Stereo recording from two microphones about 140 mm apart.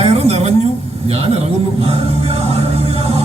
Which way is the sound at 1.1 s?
45° right (ahead or behind).